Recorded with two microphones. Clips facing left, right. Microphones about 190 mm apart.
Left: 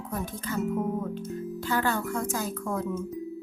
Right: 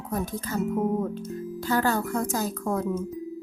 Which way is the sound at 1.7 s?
40° right (ahead or behind).